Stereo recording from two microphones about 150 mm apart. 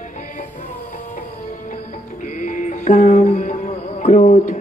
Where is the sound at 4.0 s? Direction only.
60° left (ahead or behind).